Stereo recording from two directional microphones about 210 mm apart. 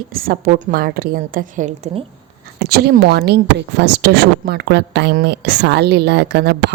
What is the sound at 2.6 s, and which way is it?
Speech, 50° right (ahead or behind).